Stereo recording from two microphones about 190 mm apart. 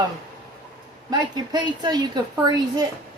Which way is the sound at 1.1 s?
20° right (ahead or behind).